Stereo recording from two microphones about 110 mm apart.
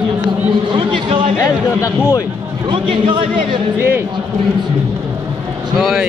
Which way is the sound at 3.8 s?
20° right (ahead or behind).